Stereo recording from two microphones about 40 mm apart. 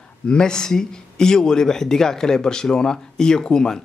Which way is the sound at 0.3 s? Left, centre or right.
Centre.